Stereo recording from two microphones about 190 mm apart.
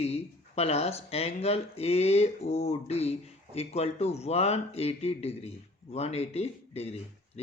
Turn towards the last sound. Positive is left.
turn(degrees=35)  # may be behind; listen again after turning